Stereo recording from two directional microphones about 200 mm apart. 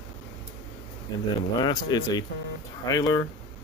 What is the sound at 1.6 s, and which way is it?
Speech, 20° left (ahead or behind).